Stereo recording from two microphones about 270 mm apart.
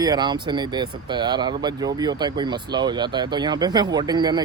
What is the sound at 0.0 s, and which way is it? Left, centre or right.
Speech, centre.